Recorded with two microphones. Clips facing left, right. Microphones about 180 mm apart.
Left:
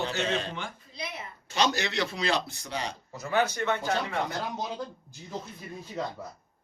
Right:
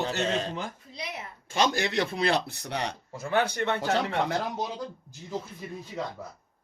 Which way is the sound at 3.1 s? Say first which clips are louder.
Even; 30° right (ahead or behind).